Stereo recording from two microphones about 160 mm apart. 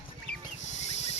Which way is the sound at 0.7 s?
45° left (ahead or behind).